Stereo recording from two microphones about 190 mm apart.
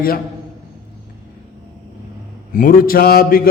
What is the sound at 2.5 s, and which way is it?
A man's voice, 45° left (ahead or behind).